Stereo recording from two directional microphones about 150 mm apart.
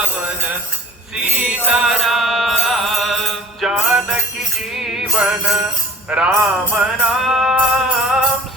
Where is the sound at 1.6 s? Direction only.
5° right (ahead or behind).